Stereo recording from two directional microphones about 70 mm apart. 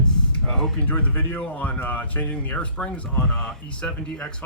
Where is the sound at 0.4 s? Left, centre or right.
Centre.